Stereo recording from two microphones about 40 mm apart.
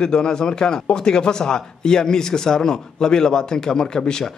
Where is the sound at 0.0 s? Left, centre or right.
Centre.